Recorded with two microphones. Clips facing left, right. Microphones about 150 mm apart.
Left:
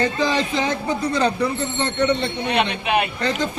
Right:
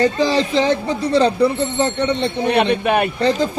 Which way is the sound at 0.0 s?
35° right (ahead or behind).